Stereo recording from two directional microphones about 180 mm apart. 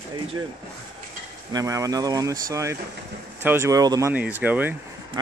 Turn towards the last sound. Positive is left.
turn(degrees=-20)  # may be behind; listen again after turning